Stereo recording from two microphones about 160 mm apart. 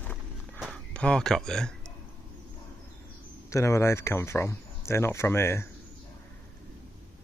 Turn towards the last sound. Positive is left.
turn(degrees=15)  # may be behind; listen again after turning